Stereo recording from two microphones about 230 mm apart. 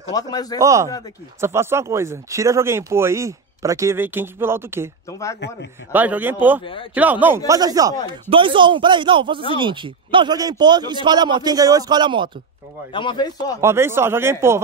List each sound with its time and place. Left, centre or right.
0.1 s speech: centre
0.6 s speech: centre
6.6 s speech: left
6.9 s a man's voice: centre
12.9 s speech: left
13.6 s speech: centre